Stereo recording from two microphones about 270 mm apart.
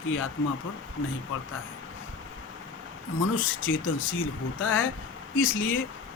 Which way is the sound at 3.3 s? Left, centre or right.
Left.